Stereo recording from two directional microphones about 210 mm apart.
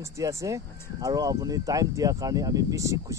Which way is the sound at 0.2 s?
15° right (ahead or behind).